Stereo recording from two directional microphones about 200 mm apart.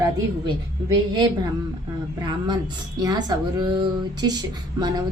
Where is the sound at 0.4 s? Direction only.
20° right (ahead or behind).